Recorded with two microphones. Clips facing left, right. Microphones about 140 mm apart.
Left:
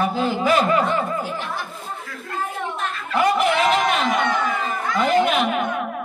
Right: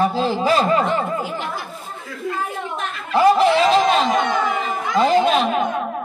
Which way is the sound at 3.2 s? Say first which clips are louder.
Right 5 dB; 30° right (ahead or behind).